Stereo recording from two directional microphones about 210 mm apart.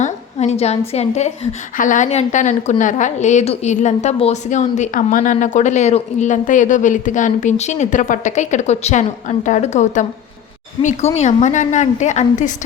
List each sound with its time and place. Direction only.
0.0 s a woman's voice: 30° left (ahead or behind)